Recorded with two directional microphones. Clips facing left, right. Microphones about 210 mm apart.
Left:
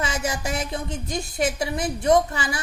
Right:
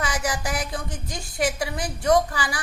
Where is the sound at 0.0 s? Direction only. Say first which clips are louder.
Left 1 dB; 25° left (ahead or behind).